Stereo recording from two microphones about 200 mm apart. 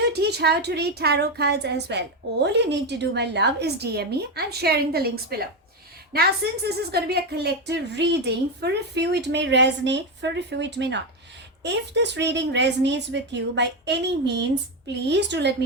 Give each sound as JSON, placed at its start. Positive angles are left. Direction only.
{"t": 0.0, "sound": "a woman's voice", "side_deg": -55}